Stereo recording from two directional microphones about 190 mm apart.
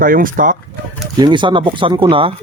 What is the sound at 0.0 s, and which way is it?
Speech, 45° right (ahead or behind).